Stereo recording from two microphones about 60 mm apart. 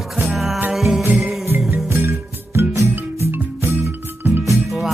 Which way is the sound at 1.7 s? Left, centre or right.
Right.